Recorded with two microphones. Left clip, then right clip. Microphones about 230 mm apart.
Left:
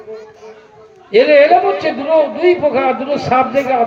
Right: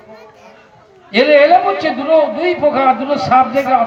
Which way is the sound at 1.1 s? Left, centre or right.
Right.